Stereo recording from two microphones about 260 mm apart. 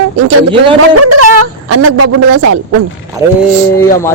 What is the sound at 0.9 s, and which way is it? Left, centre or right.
A woman's voice, right.